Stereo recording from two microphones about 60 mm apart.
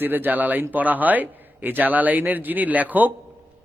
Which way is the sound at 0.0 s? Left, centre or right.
Right.